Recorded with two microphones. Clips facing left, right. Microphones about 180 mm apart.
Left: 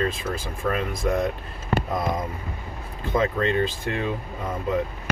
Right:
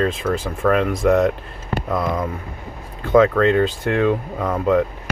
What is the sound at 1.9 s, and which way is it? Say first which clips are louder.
Speech: right 4 dB; 85° right.